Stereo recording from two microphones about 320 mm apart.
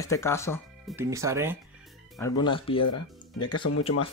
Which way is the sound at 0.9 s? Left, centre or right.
Centre.